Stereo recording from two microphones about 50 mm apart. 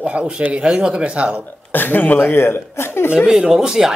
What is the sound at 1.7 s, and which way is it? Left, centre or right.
Speech, left.